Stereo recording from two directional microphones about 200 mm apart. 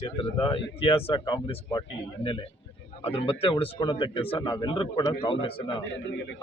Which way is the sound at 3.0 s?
30° left (ahead or behind).